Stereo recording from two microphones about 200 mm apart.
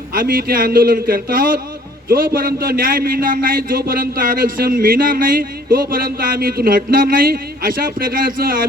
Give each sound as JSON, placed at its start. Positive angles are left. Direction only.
{"t": 0.1, "sound": "a man's voice", "side_deg": -45}